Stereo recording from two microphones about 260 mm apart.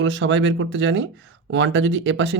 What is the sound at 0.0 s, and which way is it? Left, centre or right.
Speech, right.